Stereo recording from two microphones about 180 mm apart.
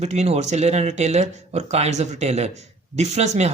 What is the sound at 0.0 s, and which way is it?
Speech, 40° right (ahead or behind).